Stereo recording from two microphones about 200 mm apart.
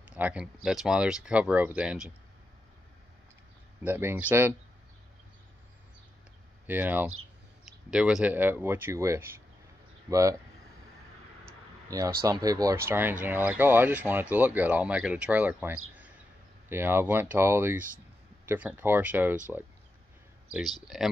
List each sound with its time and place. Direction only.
0.0 s a sound: 5° right (ahead or behind)
0.7 s speech: 5° right (ahead or behind)
3.8 s speech: 10° right (ahead or behind)
6.7 s speech: 10° right (ahead or behind)
12.3 s speech: 20° right (ahead or behind)
15.9 s a sound: 5° right (ahead or behind)
16.6 s speech: 10° right (ahead or behind)
20.8 s speech: centre (ahead or behind)